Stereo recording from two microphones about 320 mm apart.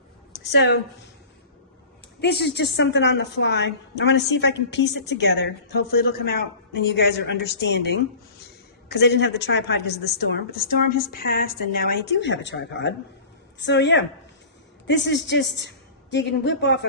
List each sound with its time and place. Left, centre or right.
0.4 s a woman's voice: left
2.2 s a woman's voice: left